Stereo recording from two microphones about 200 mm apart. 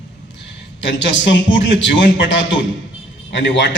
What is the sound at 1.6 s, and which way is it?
A man's voice, 65° left (ahead or behind).